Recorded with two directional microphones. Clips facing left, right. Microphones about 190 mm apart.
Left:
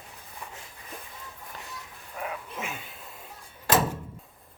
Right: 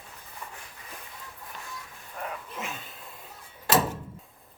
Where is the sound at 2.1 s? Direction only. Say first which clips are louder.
Left 1 dB; 5° left (ahead or behind).